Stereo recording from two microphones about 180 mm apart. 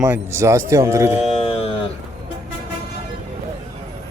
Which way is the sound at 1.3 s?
35° left (ahead or behind).